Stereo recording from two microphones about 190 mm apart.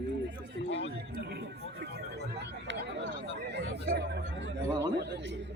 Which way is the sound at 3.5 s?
65° right (ahead or behind).